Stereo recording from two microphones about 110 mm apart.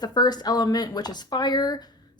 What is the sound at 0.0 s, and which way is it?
A woman's voice, 40° left (ahead or behind).